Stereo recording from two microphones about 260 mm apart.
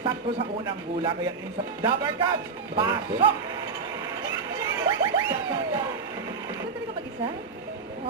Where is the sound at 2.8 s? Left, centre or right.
Centre.